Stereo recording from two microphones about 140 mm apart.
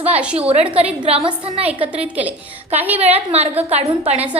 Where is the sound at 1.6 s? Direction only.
10° right (ahead or behind).